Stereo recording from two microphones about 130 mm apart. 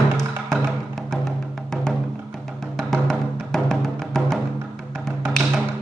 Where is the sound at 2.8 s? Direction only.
5° left (ahead or behind).